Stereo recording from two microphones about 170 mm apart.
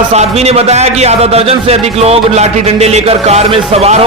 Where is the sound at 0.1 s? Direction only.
40° right (ahead or behind).